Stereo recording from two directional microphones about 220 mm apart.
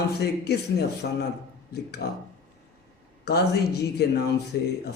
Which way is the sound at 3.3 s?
45° left (ahead or behind).